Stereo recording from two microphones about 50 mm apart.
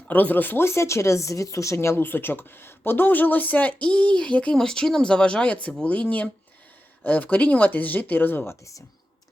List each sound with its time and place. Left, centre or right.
0.1 s speech: left
0.6 s speech: left
2.0 s speech: left
4.5 s speech: centre; by 8.5 s left